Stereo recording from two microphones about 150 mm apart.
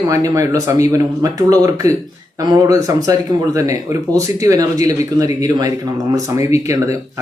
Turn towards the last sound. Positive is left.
turn(degrees=-20)  # may be behind; listen again after turning